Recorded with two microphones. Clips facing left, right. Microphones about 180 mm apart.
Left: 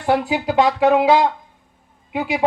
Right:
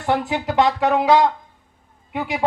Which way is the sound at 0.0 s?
15° left (ahead or behind).